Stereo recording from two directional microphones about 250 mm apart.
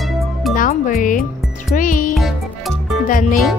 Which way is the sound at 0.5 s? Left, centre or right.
Left.